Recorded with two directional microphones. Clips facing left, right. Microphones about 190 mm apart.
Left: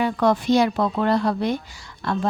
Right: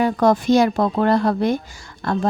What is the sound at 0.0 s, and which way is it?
A woman's voice, 45° right (ahead or behind).